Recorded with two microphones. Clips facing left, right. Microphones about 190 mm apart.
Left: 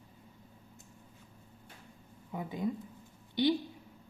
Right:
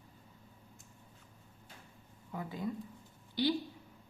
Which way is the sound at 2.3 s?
20° left (ahead or behind).